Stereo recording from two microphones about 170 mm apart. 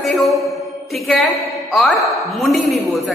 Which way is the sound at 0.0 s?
Centre (ahead or behind).